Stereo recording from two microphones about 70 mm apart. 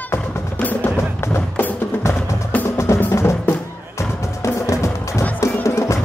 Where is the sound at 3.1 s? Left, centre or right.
Left.